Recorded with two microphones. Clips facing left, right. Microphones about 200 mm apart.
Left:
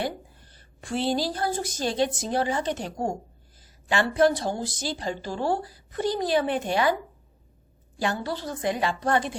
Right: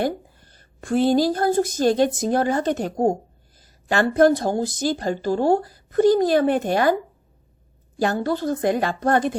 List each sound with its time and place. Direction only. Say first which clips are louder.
0.0 s a woman's voice: right 7 dB; 45° right (ahead or behind)
3.6 s a sound: right 5 dB; 40° right (ahead or behind)
4.1 s a woman's voice: right 6 dB; 50° right (ahead or behind)
8.0 s a woman's voice: right 7 dB; 45° right (ahead or behind)